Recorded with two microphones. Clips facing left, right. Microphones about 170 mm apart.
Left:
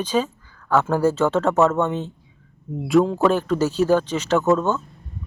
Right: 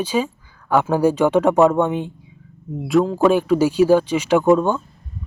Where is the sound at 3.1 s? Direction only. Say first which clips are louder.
Right 4 dB; 10° right (ahead or behind).